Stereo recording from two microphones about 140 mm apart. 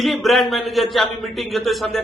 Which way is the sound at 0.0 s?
Centre (ahead or behind).